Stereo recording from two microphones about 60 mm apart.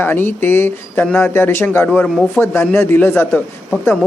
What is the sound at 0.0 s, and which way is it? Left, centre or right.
Speech, left.